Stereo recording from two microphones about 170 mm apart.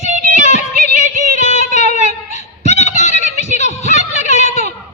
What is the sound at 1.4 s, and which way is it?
Child singing, 40° left (ahead or behind).